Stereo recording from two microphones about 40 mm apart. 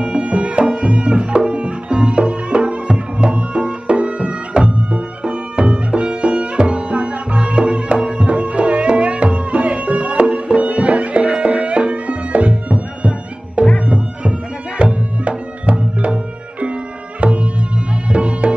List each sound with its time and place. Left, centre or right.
0.0 s music: right
13.8 s bagpipes: right
14.8 s music: right
17.2 s music: right